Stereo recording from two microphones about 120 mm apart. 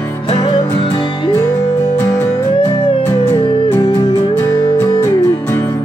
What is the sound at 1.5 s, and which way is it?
Music, 25° left (ahead or behind).